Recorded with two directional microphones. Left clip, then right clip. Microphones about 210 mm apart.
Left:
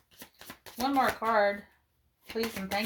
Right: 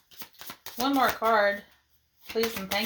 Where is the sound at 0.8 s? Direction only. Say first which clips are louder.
Right 3 dB; 35° right (ahead or behind).